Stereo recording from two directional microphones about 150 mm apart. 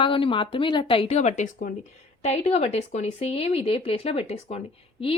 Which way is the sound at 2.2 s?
45° left (ahead or behind).